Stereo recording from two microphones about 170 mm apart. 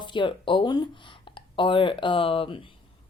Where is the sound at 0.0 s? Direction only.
25° left (ahead or behind).